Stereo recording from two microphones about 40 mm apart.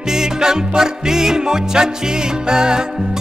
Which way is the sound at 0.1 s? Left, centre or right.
Centre.